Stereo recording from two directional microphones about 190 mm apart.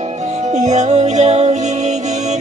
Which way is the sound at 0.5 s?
40° right (ahead or behind).